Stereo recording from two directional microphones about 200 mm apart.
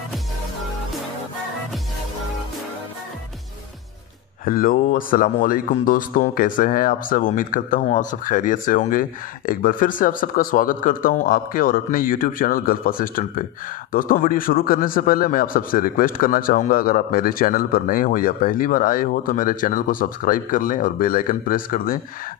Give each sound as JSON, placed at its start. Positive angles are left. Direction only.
{"t": 4.5, "sound": "a man's voice", "side_deg": 45}